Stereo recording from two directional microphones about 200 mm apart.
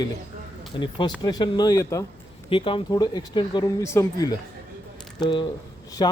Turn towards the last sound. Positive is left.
turn(degrees=20)  # may be behind; listen again after turning